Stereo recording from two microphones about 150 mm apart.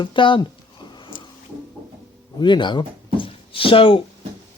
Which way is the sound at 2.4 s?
30° left (ahead or behind).